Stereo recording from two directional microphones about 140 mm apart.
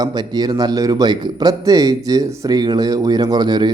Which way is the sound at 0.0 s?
30° right (ahead or behind).